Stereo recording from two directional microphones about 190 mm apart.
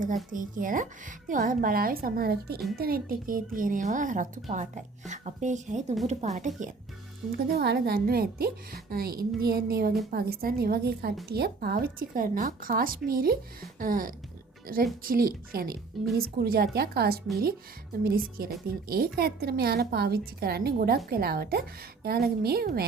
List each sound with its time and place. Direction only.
0.3 s speech: 45° right (ahead or behind)
7.3 s a woman's voice: 55° right (ahead or behind)